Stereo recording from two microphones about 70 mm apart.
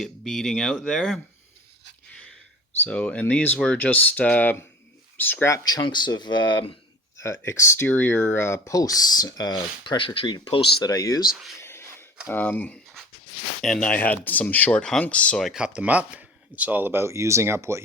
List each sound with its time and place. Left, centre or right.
0.0 s speech: centre
2.8 s speech: centre
5.6 s speech: left
7.2 s speech: left
7.9 s speech: left
8.7 s speech: left
10.9 s speech: left
11.6 s a sound: left
12.3 s speech: left
13.6 s speech: centre
13.8 s speech: left
15.5 s speech: centre; by 17.8 s right